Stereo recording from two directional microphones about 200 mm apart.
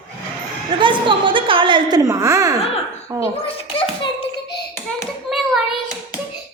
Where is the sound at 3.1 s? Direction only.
15° right (ahead or behind).